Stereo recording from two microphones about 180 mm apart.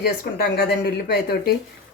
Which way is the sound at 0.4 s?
60° left (ahead or behind).